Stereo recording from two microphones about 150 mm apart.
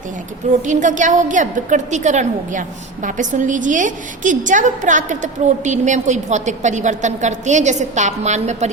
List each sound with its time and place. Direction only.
0.6 s a woman's voice: 55° right (ahead or behind)